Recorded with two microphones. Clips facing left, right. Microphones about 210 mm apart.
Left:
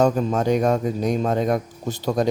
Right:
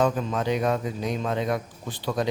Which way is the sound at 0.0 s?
40° left (ahead or behind).